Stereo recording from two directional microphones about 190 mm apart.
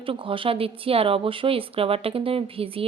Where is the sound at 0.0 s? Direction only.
30° right (ahead or behind).